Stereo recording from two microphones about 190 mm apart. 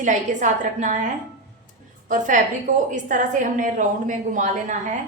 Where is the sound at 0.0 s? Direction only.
40° right (ahead or behind).